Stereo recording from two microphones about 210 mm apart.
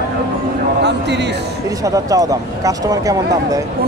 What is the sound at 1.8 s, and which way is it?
Speech, 15° right (ahead or behind).